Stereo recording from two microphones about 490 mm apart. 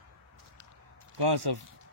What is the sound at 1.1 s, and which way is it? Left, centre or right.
Speech, right.